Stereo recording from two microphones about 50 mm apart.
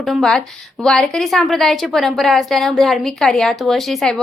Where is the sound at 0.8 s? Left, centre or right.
Centre.